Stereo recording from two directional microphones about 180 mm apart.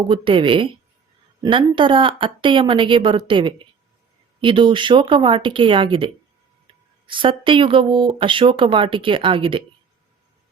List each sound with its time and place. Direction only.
0.1 s speech: 30° right (ahead or behind)
7.1 s speech: 30° right (ahead or behind)